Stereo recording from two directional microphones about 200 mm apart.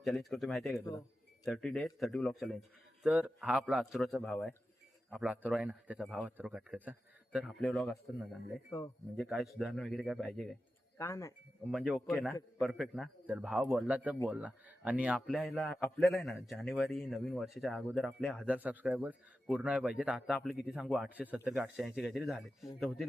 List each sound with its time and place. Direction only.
0.0 s a man's voice: centre (ahead or behind)
5.2 s a man's voice: 5° right (ahead or behind)
8.7 s speech: 15° left (ahead or behind)
9.1 s a man's voice: centre (ahead or behind)
10.9 s speech: 15° left (ahead or behind)
11.7 s a man's voice: centre (ahead or behind)